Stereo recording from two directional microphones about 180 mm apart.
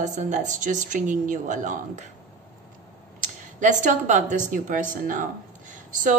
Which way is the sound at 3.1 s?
45° right (ahead or behind).